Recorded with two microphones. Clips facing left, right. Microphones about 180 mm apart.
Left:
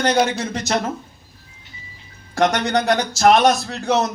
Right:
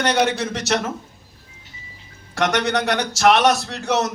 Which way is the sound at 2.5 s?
75° right (ahead or behind).